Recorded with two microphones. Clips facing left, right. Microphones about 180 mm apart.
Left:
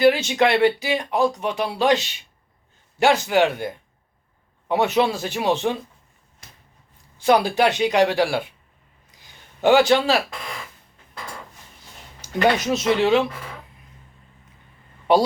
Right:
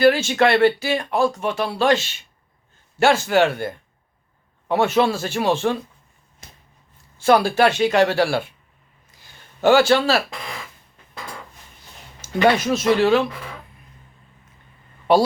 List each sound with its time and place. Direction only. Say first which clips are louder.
0.0 s speech: right 1 dB; 20° left (ahead or behind)
7.2 s speech: right 2 dB; 15° left (ahead or behind)
9.6 s speech: right 1 dB; 15° left (ahead or behind)
12.5 s speech: right 2 dB; 20° left (ahead or behind)